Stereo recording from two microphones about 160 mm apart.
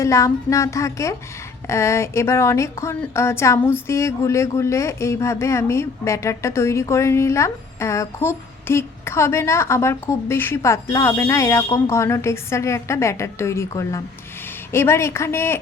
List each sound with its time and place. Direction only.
0.0 s a woman's voice: 20° left (ahead or behind)